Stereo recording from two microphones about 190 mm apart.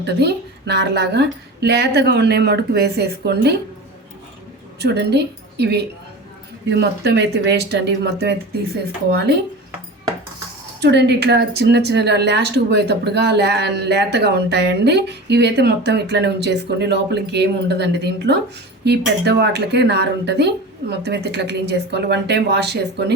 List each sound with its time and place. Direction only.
0.0 s speech: 60° right (ahead or behind)
4.8 s a woman's voice: 60° right (ahead or behind)
10.8 s speech: 60° right (ahead or behind)